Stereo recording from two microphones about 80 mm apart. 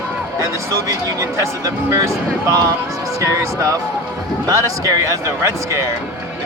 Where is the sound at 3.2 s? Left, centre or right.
Right.